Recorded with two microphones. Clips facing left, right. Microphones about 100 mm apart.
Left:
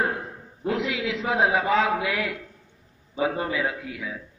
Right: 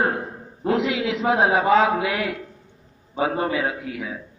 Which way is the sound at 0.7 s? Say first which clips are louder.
Right 5 dB; 70° right (ahead or behind).